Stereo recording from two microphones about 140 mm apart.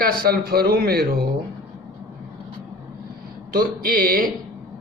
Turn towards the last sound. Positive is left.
turn(degrees=-90)